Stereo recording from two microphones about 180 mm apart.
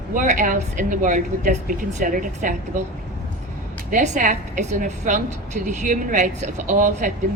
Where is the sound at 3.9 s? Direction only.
45° right (ahead or behind).